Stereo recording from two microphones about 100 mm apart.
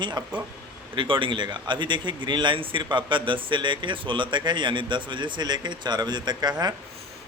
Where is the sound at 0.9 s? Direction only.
55° right (ahead or behind).